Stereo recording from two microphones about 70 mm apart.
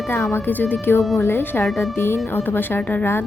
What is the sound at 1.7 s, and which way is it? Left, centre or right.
Speech, centre.